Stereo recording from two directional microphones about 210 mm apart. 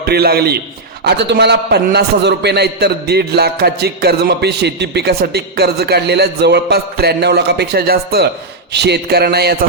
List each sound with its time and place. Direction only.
0.0 s a man's voice: 50° right (ahead or behind)